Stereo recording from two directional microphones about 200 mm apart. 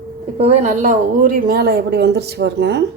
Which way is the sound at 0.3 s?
35° right (ahead or behind).